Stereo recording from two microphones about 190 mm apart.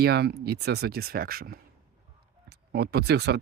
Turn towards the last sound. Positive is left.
turn(degrees=-60)  # may be behind; listen again after turning